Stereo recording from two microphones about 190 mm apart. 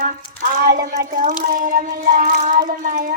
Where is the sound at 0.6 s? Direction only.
50° right (ahead or behind).